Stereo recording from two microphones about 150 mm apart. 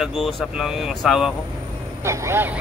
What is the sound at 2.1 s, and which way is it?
Speech, 15° right (ahead or behind).